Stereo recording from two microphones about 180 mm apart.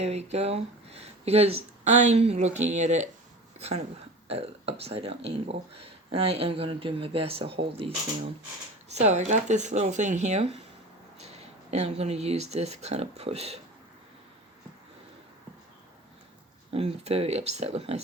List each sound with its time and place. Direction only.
0.0 s speech: 35° right (ahead or behind)
4.3 s speech: 35° right (ahead or behind)
16.7 s speech: 35° right (ahead or behind)